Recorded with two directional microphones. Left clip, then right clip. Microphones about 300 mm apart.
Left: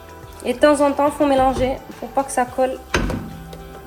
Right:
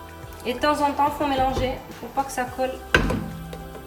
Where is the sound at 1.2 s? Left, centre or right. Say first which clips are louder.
Left 6 dB; centre.